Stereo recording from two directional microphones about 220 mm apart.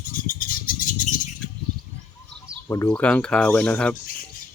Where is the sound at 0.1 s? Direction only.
40° left (ahead or behind).